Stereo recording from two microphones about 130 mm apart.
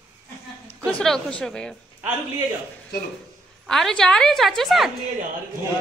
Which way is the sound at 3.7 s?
5° left (ahead or behind).